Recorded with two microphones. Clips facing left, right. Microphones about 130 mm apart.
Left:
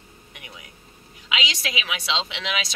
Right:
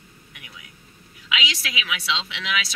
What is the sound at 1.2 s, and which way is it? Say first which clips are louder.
A woman's voice: even; 35° left (ahead or behind).